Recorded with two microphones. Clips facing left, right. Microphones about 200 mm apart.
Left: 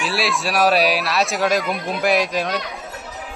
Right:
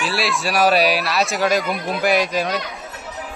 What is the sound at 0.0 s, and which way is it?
Speech, centre (ahead or behind).